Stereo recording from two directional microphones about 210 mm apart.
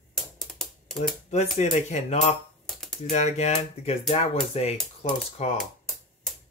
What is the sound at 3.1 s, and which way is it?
Speech, 30° left (ahead or behind).